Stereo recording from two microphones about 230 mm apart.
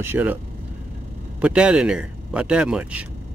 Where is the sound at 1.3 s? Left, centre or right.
Centre.